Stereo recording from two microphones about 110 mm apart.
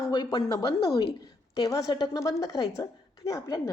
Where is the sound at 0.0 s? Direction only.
40° left (ahead or behind).